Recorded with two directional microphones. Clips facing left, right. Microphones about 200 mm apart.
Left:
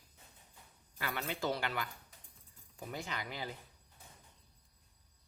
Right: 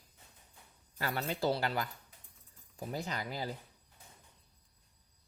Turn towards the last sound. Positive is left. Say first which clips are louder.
# right 4 dB
turn(degrees=-40)  # may be behind; listen again after turning